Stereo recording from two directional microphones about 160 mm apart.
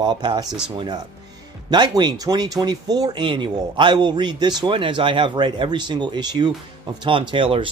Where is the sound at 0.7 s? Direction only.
25° right (ahead or behind).